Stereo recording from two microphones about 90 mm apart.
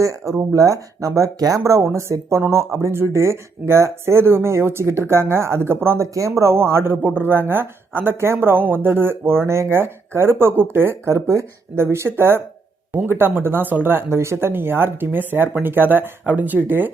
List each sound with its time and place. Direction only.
0.0 s speech: 35° right (ahead or behind)